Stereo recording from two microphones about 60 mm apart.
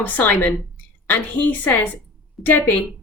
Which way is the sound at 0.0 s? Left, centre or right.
Left.